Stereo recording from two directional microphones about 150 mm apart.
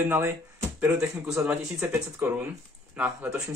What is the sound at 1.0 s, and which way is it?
Speech, 5° right (ahead or behind).